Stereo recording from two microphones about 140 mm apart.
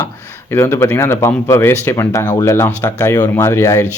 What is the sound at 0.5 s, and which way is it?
Speech, 20° left (ahead or behind).